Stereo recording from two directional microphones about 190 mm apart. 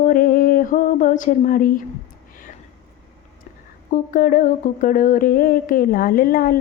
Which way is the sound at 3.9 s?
45° left (ahead or behind).